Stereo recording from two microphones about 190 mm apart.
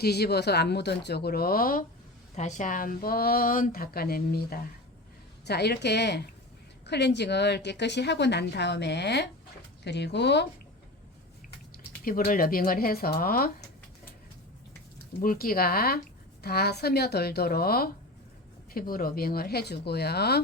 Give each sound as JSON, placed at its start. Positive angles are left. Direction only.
{"t": 0.0, "sound": "a woman's voice", "side_deg": 60}
{"t": 12.0, "sound": "speech", "side_deg": 50}
{"t": 15.2, "sound": "a woman's voice", "side_deg": 50}